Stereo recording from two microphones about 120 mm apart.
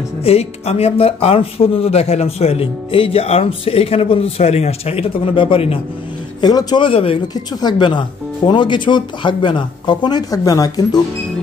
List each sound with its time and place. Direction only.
0.2 s speech: 60° left (ahead or behind)
6.4 s speech: 35° left (ahead or behind)
6.9 s speech: 50° left (ahead or behind)
7.6 s speech: 40° left (ahead or behind)